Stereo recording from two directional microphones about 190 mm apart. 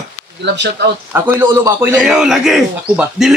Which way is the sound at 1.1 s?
10° right (ahead or behind).